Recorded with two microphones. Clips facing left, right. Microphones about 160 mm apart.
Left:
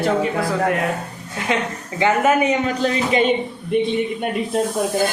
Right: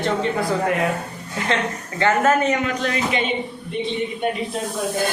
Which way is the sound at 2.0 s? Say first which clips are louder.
Left 1 dB; 15° left (ahead or behind).